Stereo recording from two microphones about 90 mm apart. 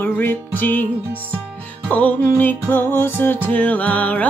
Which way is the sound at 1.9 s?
15° left (ahead or behind).